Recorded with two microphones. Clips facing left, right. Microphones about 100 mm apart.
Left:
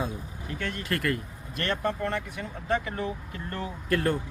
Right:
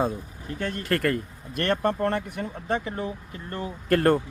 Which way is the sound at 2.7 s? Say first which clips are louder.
Even; 25° right (ahead or behind).